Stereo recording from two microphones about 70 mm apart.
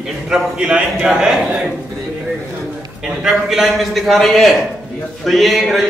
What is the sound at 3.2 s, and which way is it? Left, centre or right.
Speech, centre.